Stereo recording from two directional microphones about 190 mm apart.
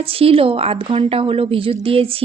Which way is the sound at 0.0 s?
30° right (ahead or behind).